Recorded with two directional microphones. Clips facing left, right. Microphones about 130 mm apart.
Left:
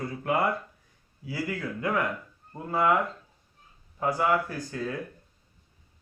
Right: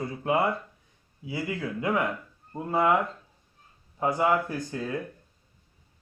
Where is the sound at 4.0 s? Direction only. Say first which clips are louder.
Right 1 dB; 20° right (ahead or behind).